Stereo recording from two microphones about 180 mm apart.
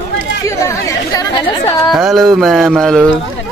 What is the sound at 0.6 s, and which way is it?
Chatter, 20° left (ahead or behind).